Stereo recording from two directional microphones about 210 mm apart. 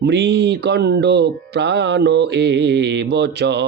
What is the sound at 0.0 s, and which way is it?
Speech, 55° right (ahead or behind).